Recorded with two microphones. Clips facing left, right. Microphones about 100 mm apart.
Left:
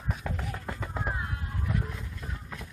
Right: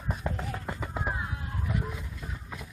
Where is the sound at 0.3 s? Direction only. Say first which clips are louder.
Right 3 dB; 25° right (ahead or behind).